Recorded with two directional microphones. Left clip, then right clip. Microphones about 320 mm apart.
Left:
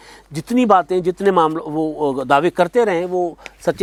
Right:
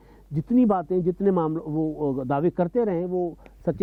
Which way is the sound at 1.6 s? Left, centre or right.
Left.